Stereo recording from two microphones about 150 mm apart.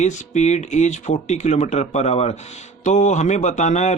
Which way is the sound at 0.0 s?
50° left (ahead or behind).